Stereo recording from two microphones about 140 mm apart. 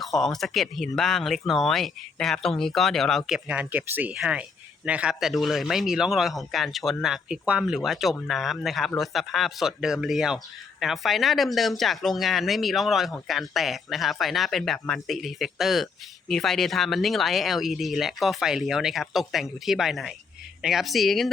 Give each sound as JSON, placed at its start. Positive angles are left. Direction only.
{"t": 0.0, "sound": "speech", "side_deg": 0}